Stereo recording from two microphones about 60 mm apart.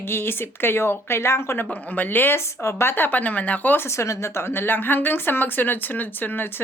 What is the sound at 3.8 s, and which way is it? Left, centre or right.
A woman's voice, left.